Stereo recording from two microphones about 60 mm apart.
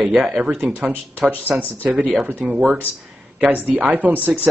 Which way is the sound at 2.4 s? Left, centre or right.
Centre.